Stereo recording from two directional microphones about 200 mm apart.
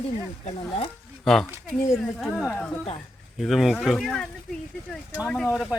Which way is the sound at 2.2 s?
Centre (ahead or behind).